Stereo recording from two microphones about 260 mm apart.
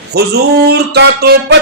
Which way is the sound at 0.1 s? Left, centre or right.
Right.